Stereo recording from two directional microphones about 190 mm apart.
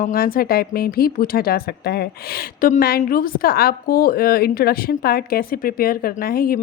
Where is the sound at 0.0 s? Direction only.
50° left (ahead or behind).